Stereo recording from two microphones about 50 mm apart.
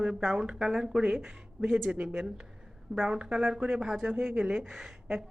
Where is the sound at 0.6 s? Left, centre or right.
Centre.